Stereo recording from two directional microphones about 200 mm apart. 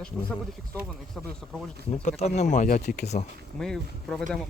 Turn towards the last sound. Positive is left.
turn(degrees=5)  # may be behind; listen again after turning